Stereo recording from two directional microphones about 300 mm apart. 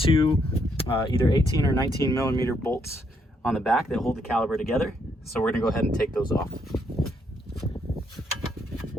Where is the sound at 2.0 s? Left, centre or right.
Centre.